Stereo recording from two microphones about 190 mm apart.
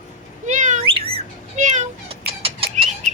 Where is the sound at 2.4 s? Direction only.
30° right (ahead or behind).